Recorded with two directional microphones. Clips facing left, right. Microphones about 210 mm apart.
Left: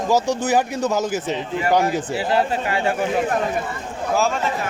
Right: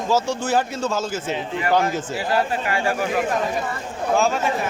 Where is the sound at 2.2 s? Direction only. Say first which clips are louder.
Left 1 dB; 25° left (ahead or behind).